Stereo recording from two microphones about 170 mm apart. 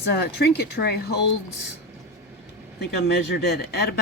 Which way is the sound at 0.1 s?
70° left (ahead or behind).